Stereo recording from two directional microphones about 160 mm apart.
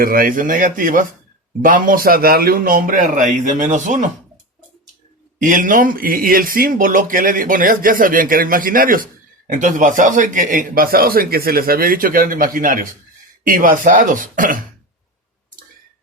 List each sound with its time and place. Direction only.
0.0 s speech: 60° right (ahead or behind)
5.4 s speech: 55° right (ahead or behind)